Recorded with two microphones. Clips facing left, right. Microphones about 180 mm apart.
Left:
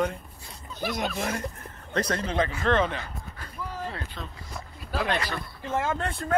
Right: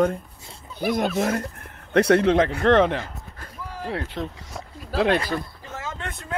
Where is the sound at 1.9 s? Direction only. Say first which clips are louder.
Right 10 dB; 75° right (ahead or behind).